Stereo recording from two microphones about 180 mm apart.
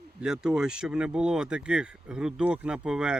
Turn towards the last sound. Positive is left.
turn(degrees=-5)  # may be behind; listen again after turning